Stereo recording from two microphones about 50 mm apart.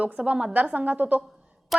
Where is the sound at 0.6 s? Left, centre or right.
Right.